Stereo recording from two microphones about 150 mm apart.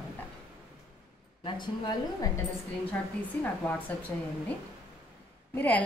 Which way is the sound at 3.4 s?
10° left (ahead or behind).